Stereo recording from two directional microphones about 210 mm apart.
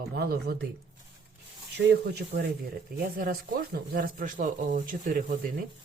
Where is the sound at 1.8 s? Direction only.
55° right (ahead or behind).